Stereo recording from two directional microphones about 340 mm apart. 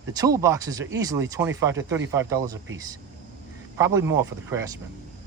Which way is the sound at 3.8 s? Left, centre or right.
Centre.